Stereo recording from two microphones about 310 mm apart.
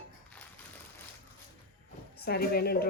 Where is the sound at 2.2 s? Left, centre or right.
Left.